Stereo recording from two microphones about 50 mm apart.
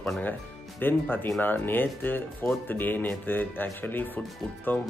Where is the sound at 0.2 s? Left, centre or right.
Left.